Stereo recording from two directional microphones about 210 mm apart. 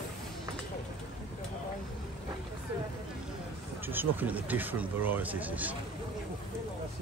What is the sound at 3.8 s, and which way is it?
Speech, 10° right (ahead or behind).